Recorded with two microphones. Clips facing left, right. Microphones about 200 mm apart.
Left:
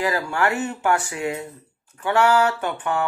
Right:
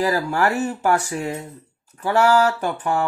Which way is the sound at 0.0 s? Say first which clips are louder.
Right 2 dB; 40° right (ahead or behind).